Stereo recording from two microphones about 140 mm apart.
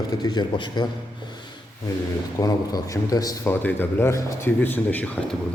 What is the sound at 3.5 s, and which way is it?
A man's voice, 10° left (ahead or behind).